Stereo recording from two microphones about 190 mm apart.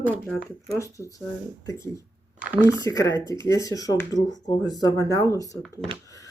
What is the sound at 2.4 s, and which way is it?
Speech, 10° right (ahead or behind).